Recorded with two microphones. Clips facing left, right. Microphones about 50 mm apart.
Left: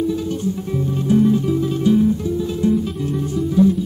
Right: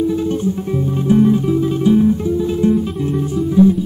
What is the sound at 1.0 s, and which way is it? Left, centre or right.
Music, right.